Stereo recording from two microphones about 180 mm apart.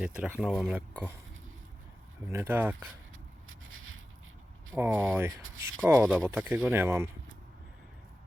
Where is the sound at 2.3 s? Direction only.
10° right (ahead or behind).